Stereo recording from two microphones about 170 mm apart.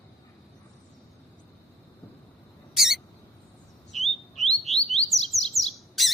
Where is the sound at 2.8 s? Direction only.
Centre (ahead or behind).